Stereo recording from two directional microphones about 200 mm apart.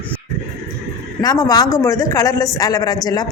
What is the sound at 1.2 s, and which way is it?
Speech, 20° left (ahead or behind).